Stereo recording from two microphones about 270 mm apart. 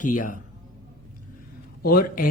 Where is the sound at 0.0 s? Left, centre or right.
Left.